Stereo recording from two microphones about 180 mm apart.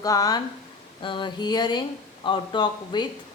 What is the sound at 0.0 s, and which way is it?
Speech, 20° left (ahead or behind).